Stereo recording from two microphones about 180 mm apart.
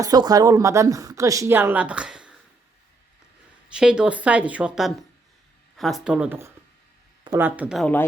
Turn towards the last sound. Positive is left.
turn(degrees=-5)  # may be behind; listen again after turning